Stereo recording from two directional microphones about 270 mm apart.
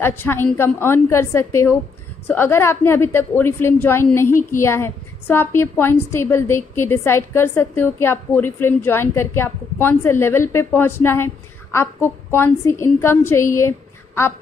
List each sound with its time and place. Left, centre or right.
0.0 s a woman's voice: centre
4.3 s a woman's voice: left
4.6 s a woman's voice: centre